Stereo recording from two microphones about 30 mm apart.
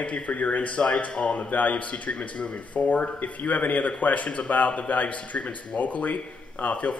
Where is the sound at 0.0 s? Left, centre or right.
Left.